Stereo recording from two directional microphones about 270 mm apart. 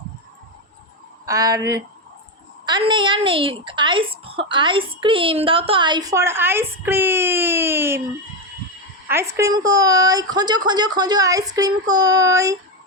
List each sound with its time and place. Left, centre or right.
1.2 s a woman's voice: centre
9.0 s a woman's voice: centre